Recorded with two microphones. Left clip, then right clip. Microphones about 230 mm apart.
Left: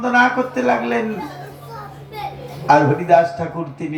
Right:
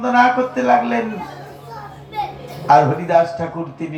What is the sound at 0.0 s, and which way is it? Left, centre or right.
Speech, left.